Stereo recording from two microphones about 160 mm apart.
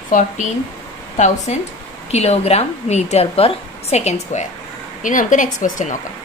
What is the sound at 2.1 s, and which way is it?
A woman's voice, 40° left (ahead or behind).